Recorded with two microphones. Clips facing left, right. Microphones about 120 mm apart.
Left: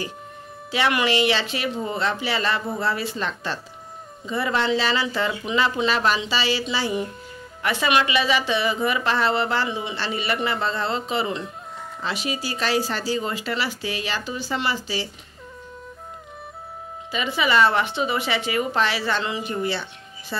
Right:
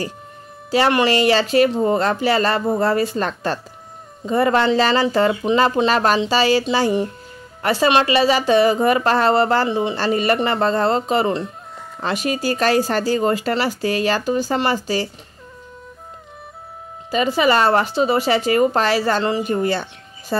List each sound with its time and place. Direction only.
0.7 s a woman's voice: 40° right (ahead or behind)
17.1 s a woman's voice: 40° right (ahead or behind)